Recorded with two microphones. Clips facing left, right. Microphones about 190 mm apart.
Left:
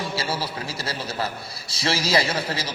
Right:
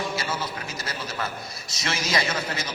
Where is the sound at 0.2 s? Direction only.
30° left (ahead or behind).